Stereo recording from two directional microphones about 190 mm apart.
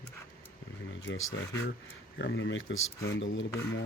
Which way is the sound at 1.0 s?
90° left.